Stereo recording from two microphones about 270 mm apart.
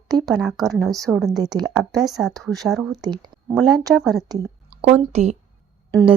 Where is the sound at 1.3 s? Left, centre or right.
Centre.